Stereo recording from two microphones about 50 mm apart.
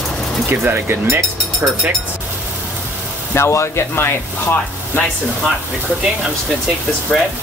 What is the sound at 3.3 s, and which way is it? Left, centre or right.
Speech, left.